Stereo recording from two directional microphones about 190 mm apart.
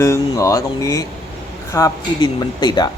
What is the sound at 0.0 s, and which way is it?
Speech, 15° left (ahead or behind).